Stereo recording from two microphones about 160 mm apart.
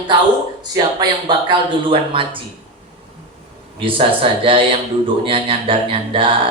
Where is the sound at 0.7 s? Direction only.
25° right (ahead or behind).